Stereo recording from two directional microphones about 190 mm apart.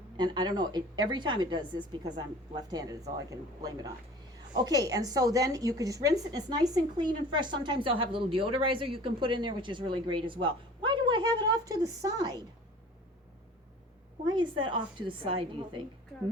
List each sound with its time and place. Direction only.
0.2 s a woman's voice: 25° right (ahead or behind)
14.3 s a woman's voice: 25° right (ahead or behind)